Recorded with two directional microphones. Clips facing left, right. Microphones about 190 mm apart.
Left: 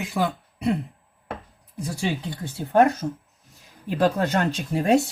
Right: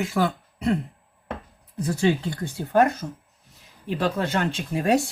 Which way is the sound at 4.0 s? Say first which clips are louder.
Left 3 dB; 40° left (ahead or behind).